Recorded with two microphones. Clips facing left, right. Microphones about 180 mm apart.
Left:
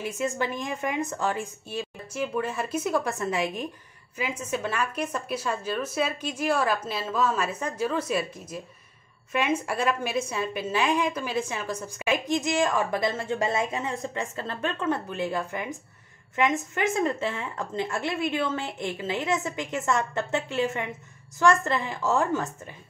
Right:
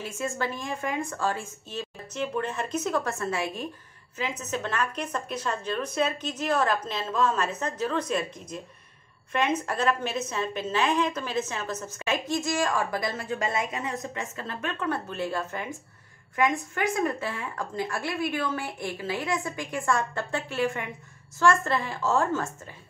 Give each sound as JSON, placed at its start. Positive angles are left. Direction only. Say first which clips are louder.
{"t": 0.0, "sound": "a woman's voice", "louder": "left 2 dB", "side_deg": 15}
{"t": 14.9, "sound": "a woman's voice", "louder": "left 1 dB", "side_deg": 15}